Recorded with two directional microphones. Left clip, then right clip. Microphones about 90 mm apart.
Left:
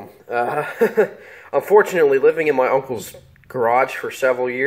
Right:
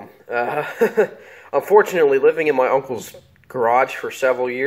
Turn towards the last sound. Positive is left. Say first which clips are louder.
# even
turn(degrees=-5)  # may be behind; listen again after turning